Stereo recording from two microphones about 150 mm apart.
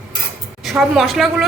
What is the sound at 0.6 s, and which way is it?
Speech, centre (ahead or behind).